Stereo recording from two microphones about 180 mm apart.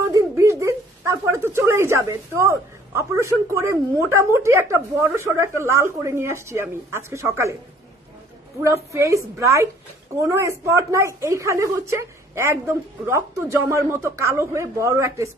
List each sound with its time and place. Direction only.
0.1 s speech: 15° right (ahead or behind)
8.6 s a woman's voice: 15° right (ahead or behind)